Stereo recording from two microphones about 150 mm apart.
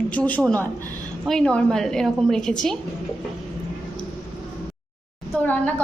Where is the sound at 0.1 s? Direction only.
10° left (ahead or behind).